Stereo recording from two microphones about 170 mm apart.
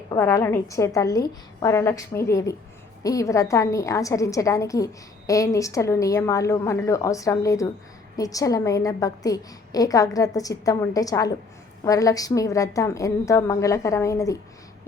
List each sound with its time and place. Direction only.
0.1 s a woman's voice: 20° left (ahead or behind)